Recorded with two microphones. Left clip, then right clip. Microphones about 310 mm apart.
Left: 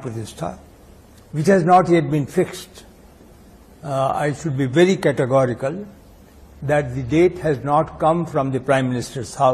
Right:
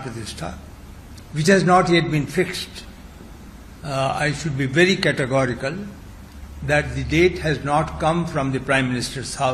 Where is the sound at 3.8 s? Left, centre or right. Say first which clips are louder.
Left 2 dB; left.